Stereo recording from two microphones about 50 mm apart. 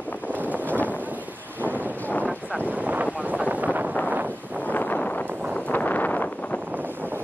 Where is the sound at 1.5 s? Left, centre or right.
Right.